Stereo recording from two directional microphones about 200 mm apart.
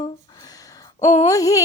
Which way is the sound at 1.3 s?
15° left (ahead or behind).